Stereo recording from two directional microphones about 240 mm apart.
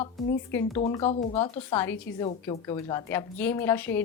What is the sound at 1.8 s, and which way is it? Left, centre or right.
A woman's voice, centre.